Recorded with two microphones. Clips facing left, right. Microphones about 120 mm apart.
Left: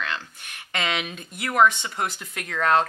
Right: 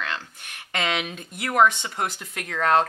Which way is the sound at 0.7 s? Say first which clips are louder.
Right 1 dB; 50° right (ahead or behind).